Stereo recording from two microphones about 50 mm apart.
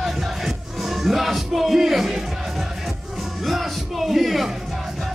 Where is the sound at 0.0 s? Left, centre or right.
Centre.